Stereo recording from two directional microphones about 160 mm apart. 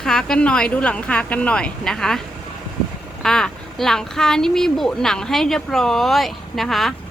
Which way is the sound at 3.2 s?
5° left (ahead or behind).